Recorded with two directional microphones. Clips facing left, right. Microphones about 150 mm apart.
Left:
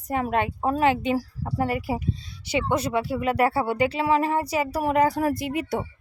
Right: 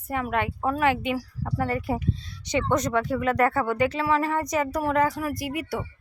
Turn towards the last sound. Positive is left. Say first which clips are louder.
# left 3 dB
turn(degrees=25)  # may be behind; listen again after turning